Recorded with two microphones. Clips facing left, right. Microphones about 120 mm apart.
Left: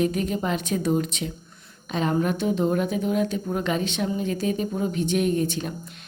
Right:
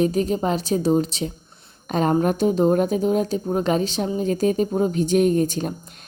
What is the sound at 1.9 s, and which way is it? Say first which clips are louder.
Speech: right 4 dB; 45° right (ahead or behind).